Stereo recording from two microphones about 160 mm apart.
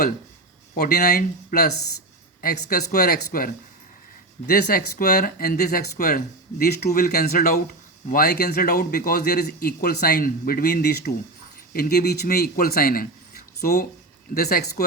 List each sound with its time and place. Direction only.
1.0 s speech: 80° left
2.4 s speech: 65° left (ahead or behind); by 11.1 s 85° left
11.7 s speech: 75° left (ahead or behind)